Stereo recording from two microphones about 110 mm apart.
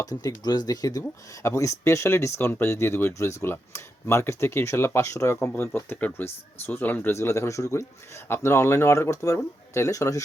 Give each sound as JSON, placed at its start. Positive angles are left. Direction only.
{"t": 0.0, "sound": "speech", "side_deg": 35}